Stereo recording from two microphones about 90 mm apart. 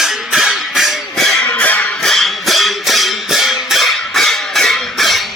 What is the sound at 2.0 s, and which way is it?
Music, 5° left (ahead or behind).